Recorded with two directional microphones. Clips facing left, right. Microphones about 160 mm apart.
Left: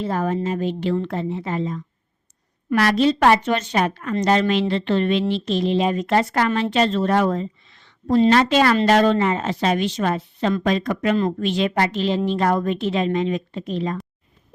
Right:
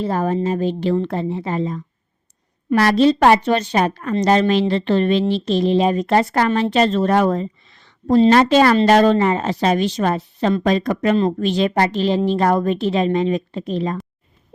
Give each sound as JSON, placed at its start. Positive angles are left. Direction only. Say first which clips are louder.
{"t": 0.0, "sound": "a woman's voice", "louder": "right 3 dB", "side_deg": -35}